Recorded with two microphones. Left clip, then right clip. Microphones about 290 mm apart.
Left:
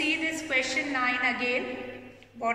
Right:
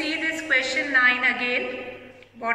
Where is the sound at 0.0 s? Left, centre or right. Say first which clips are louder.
Right 2 dB; centre.